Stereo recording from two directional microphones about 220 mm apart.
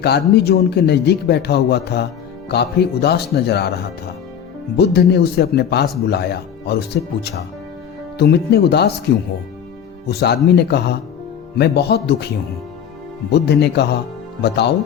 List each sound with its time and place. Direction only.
0.0 s speech: 50° left (ahead or behind)
4.8 s speech: 50° left (ahead or behind)
10.1 s speech: 50° left (ahead or behind)
13.3 s speech: 50° left (ahead or behind)